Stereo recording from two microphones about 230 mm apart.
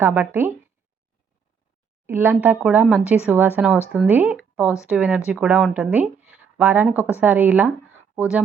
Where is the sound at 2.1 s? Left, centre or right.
Centre.